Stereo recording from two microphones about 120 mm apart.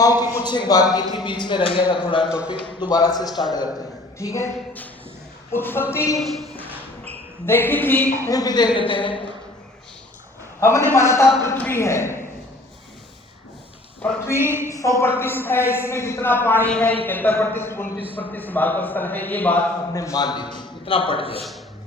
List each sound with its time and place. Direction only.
0.0 s a man's voice: 30° left (ahead or behind)
2.3 s a man's voice: 10° right (ahead or behind)
2.8 s a man's voice: 35° left (ahead or behind); by 8.0 s 15° left (ahead or behind)
8.0 s a man's voice: 25° right (ahead or behind)
8.3 s speech: 30° left (ahead or behind)
10.6 s a man's voice: 20° left (ahead or behind)
14.0 s a man's voice: 20° left (ahead or behind)
19.9 s a man's voice: 30° left (ahead or behind); by 21.4 s 50° left (ahead or behind)